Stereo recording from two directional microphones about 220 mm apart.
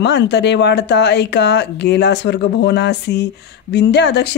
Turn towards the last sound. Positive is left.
turn(degrees=50)  # may be behind; listen again after turning